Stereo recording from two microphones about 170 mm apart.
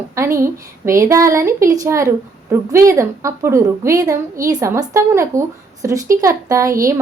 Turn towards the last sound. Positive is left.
turn(degrees=-20)  # may be behind; listen again after turning